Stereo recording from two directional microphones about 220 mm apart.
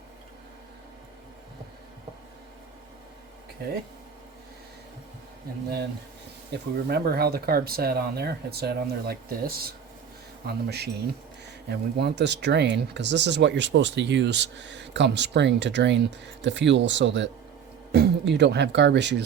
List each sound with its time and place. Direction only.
6.5 s speech: 50° right (ahead or behind)